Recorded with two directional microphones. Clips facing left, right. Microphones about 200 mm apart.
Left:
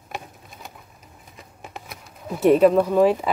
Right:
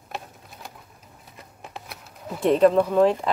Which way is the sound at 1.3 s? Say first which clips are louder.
Left 1 dB; centre (ahead or behind).